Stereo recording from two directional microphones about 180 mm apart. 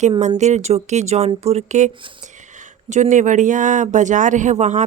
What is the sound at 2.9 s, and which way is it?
Speech, 40° right (ahead or behind).